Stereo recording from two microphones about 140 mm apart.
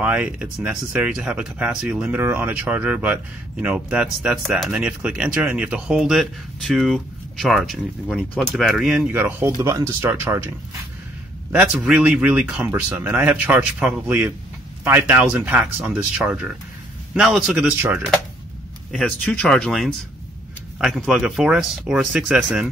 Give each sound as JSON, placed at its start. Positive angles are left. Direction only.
{"t": 0.0, "sound": "speech", "side_deg": -10}
{"t": 11.5, "sound": "speech", "side_deg": -10}
{"t": 18.9, "sound": "speech", "side_deg": 5}